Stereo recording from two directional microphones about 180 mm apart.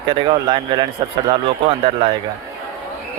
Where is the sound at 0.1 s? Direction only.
25° right (ahead or behind).